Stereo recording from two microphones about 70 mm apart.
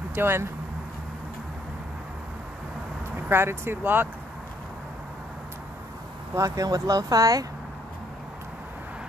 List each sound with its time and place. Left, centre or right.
0.1 s speech: right
3.2 s speech: right
6.3 s speech: right